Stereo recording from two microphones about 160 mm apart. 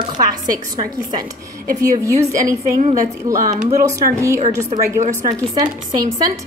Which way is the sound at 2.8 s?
50° right (ahead or behind).